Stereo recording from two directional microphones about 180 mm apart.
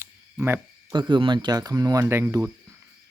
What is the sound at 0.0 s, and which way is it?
Cricket, 15° right (ahead or behind).